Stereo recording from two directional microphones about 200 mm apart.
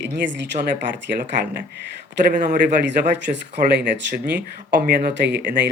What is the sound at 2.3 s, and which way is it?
Speech, 45° right (ahead or behind).